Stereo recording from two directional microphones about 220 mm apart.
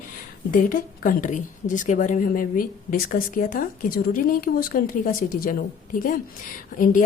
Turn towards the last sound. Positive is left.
turn(degrees=40)  # may be behind; listen again after turning